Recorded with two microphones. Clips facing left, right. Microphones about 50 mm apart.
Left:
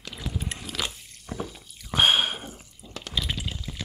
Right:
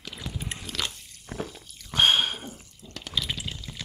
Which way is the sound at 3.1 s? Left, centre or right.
Centre.